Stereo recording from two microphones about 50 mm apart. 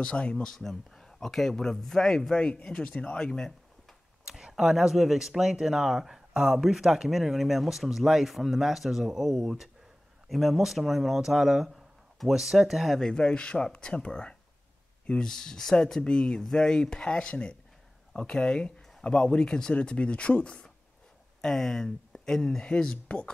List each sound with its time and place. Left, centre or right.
0.0 s speech: left
0.4 s a man's voice: centre
4.2 s speech: centre
13.0 s a man's voice: centre
21.4 s a man's voice: centre